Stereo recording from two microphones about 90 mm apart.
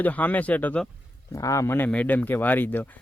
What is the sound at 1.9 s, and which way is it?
Speech, 15° left (ahead or behind).